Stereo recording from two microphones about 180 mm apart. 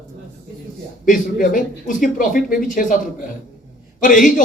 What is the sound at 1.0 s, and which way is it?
Speech, 50° left (ahead or behind).